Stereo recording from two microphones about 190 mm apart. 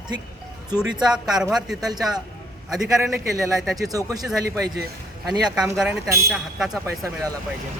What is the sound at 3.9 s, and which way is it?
Speech, 20° right (ahead or behind).